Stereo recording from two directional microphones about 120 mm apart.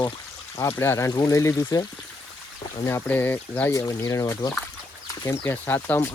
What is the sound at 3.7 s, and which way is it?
Speech, 25° left (ahead or behind).